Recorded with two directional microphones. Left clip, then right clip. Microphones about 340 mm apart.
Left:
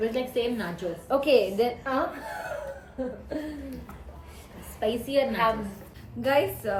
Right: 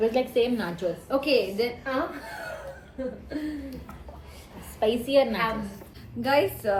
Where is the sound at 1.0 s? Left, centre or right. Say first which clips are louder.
Left 3 dB; centre.